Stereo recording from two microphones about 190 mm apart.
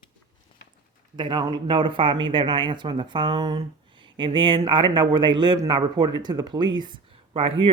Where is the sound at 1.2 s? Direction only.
25° right (ahead or behind).